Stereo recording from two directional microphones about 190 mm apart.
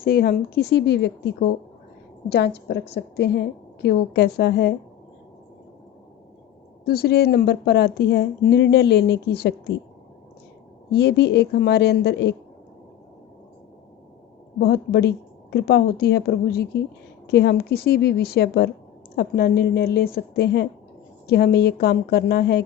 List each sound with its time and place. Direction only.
0.0 s speech: 55° left (ahead or behind)
2.3 s speech: 60° left (ahead or behind)
6.8 s speech: 55° left (ahead or behind)
10.9 s speech: 60° left (ahead or behind)
14.6 s speech: 55° left (ahead or behind)